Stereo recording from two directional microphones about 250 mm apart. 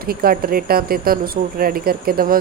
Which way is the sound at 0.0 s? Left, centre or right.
Right.